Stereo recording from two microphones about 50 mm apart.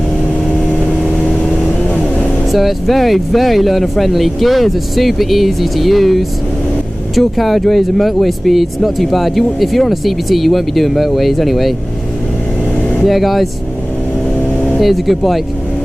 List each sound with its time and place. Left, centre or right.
2.1 s speech: centre
13.0 s speech: centre
14.8 s speech: centre